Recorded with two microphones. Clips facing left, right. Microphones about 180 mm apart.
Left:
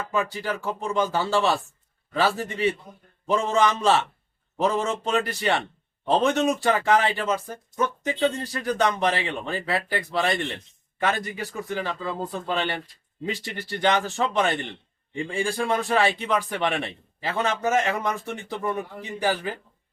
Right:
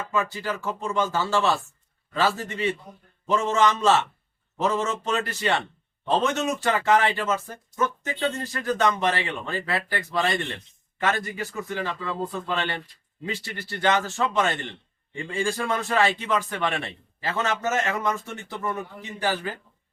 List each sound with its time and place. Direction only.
0.1 s speech: 15° left (ahead or behind)